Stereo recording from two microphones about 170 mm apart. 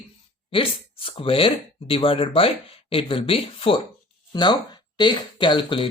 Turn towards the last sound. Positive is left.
turn(degrees=30)  # may be behind; listen again after turning